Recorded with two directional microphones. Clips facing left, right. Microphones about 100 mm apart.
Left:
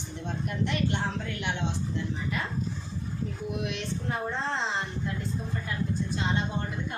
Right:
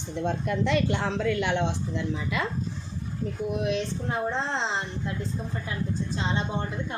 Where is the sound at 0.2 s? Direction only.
90° right.